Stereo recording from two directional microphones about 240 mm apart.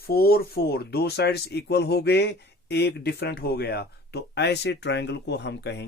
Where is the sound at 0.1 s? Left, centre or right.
Left.